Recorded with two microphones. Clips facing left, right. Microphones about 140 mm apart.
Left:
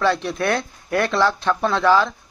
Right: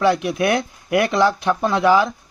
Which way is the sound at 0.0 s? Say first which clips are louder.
Right 3 dB; 15° right (ahead or behind).